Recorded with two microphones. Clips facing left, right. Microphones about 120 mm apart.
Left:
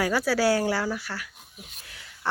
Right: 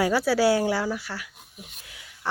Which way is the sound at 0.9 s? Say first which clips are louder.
Even; 15° right (ahead or behind).